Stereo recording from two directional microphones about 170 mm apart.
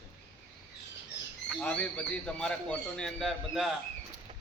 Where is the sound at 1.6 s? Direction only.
10° left (ahead or behind).